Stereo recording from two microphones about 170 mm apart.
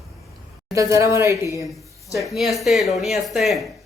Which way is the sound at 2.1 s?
Centre (ahead or behind).